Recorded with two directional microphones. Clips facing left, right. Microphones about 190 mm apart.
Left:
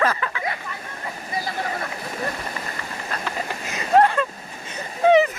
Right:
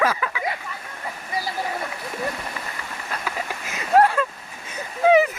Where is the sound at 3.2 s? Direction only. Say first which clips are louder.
Left 1 dB; 5° right (ahead or behind).